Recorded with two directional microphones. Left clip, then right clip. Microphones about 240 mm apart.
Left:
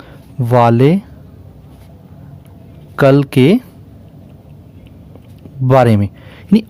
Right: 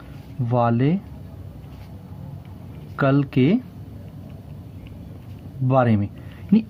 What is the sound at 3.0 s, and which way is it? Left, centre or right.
Speech, left.